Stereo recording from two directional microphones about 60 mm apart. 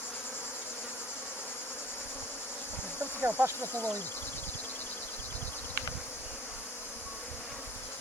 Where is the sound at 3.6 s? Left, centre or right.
Left.